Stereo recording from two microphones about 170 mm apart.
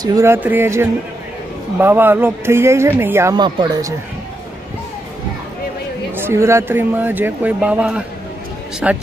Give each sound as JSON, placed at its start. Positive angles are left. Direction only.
{"t": 0.0, "sound": "speech", "side_deg": -20}
{"t": 3.3, "sound": "speech", "side_deg": -25}
{"t": 6.1, "sound": "speech", "side_deg": -15}